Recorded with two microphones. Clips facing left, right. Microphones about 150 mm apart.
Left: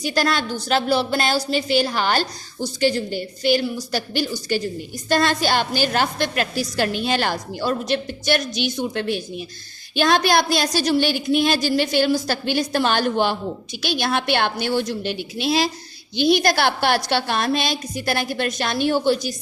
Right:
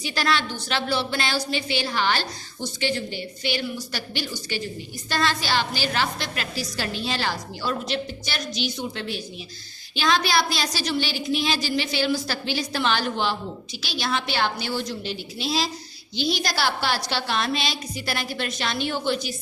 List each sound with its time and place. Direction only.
0.0 s a woman's voice: 45° left (ahead or behind)